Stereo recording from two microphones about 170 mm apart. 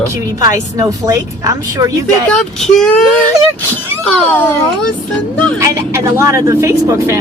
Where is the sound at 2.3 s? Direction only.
5° left (ahead or behind).